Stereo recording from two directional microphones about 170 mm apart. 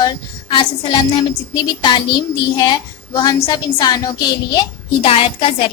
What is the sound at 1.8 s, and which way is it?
A woman's voice, 25° left (ahead or behind).